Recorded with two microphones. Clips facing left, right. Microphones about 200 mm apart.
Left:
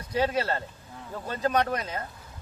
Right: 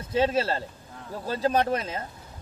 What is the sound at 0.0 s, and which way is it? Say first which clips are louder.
Speech: right 3 dB; 25° right (ahead or behind).